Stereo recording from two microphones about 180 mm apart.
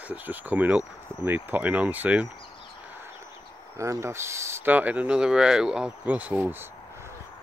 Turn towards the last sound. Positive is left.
turn(degrees=-10)  # may be behind; listen again after turning